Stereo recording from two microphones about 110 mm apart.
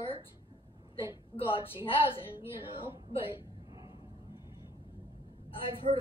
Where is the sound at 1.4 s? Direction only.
55° left (ahead or behind).